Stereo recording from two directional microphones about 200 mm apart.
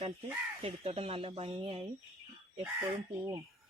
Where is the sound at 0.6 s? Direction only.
30° right (ahead or behind).